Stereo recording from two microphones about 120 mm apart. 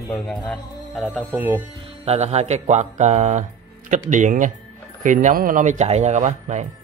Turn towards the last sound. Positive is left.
turn(degrees=-75)  # may be behind; listen again after turning